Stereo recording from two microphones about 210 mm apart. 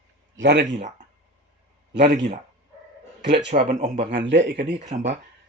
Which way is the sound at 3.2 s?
55° right (ahead or behind).